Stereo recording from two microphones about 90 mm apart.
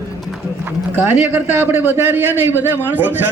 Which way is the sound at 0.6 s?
25° right (ahead or behind).